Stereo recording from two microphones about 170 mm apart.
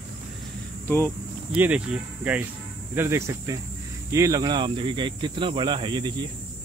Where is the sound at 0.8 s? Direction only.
15° left (ahead or behind).